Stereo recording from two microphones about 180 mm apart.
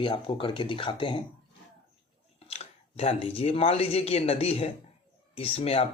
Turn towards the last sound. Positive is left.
turn(degrees=35)  # may be behind; listen again after turning